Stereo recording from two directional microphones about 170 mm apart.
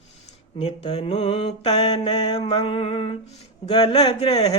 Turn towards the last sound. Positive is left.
turn(degrees=25)  # may be behind; listen again after turning